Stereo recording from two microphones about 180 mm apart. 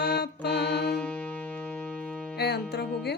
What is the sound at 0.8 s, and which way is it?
Music, 5° left (ahead or behind).